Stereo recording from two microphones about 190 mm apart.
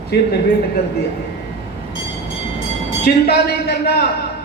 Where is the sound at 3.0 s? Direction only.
60° left (ahead or behind).